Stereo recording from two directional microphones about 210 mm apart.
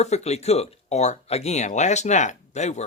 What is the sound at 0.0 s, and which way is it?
Speech, 30° left (ahead or behind).